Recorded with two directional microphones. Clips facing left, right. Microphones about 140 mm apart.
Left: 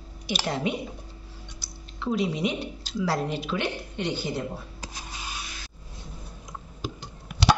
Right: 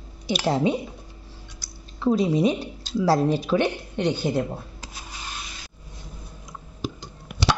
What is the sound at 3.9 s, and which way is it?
Speech, 55° right (ahead or behind).